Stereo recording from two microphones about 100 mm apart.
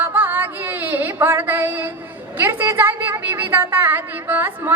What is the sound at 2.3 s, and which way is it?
A woman's voice, 20° right (ahead or behind).